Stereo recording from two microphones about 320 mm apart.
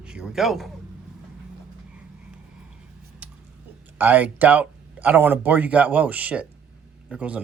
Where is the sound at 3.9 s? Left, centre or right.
Centre.